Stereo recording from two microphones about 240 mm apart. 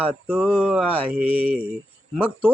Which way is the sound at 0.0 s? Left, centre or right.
Centre.